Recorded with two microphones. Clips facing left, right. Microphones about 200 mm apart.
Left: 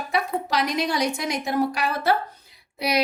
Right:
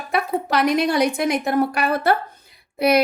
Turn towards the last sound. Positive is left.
turn(degrees=-55)  # may be behind; listen again after turning